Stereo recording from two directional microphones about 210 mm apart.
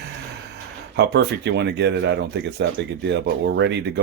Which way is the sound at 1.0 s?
55° right (ahead or behind).